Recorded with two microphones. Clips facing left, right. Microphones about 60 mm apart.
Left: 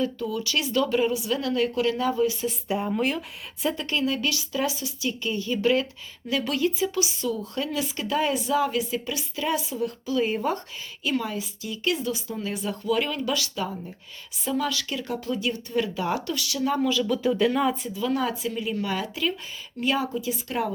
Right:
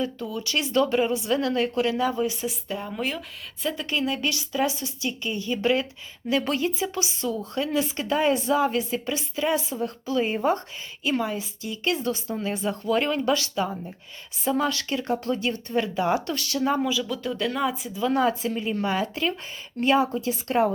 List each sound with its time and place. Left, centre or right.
0.0 s speech: right
2.0 s speech: centre
2.2 s speech: right
2.6 s speech: centre
3.8 s speech: centre
4.3 s speech: right
9.6 s speech: right
15.2 s speech: right
15.7 s speech: right
16.2 s speech: right
16.6 s speech: centre
16.9 s speech: centre
17.9 s speech: right